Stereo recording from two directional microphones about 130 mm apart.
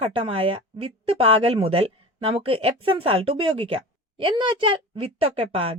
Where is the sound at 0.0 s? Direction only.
45° right (ahead or behind).